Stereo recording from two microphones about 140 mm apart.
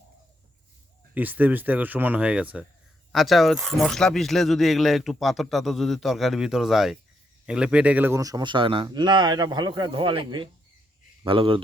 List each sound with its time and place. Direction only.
1.1 s a man's voice: 10° right (ahead or behind); by 11.6 s 40° right (ahead or behind)